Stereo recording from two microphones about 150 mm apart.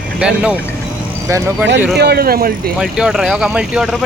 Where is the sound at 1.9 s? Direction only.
90° right.